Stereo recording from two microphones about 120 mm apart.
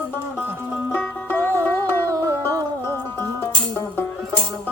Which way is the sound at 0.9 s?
15° left (ahead or behind).